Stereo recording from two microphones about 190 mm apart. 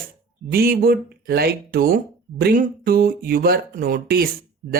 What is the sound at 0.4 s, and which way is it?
Speech, 50° right (ahead or behind).